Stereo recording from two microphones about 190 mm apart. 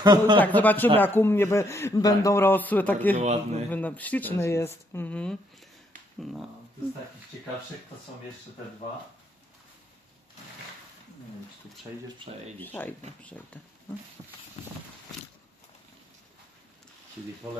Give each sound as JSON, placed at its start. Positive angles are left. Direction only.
{"t": 0.0, "sound": "speech", "side_deg": -25}
{"t": 0.3, "sound": "speech", "side_deg": 10}
{"t": 3.2, "sound": "a man's voice", "side_deg": -35}
{"t": 3.7, "sound": "speech", "side_deg": 10}
{"t": 12.5, "sound": "speech", "side_deg": 10}
{"t": 14.6, "sound": "a sound", "side_deg": 35}
{"t": 17.5, "sound": "speech", "side_deg": -10}